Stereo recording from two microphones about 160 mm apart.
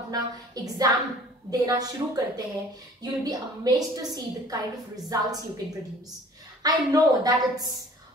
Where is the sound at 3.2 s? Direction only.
25° right (ahead or behind).